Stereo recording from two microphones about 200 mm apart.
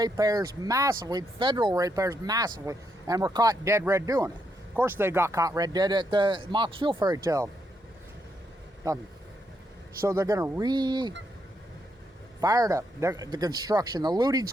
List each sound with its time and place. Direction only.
0.0 s speech: 20° right (ahead or behind)
10.0 s speech: 15° right (ahead or behind)
12.4 s speech: 20° right (ahead or behind)